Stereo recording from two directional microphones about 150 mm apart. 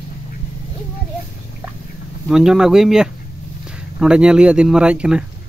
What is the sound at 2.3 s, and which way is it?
Speech, 5° right (ahead or behind).